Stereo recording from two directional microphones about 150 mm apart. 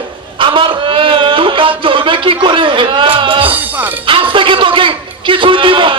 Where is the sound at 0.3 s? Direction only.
35° right (ahead or behind).